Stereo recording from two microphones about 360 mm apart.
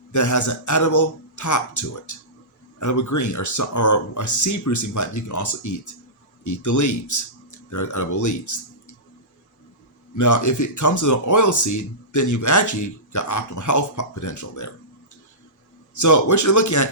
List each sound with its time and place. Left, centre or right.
0.1 s speech: left
10.2 s speech: left
16.0 s speech: left